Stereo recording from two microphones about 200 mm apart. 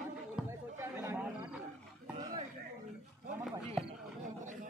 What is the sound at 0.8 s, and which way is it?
Chatter, 10° right (ahead or behind).